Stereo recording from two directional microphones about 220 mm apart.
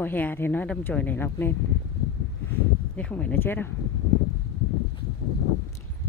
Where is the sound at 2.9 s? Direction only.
5° left (ahead or behind).